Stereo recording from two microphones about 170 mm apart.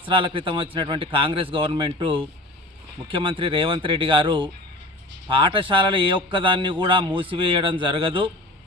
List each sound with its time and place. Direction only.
0.0 s a man's voice: 30° right (ahead or behind)